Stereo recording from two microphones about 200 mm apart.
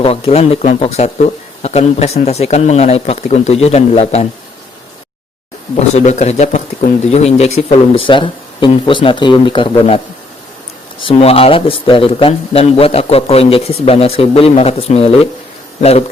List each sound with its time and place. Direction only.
0.0 s speech: 30° left (ahead or behind)
5.9 s speech: 35° left (ahead or behind)
11.0 s speech: 30° left (ahead or behind)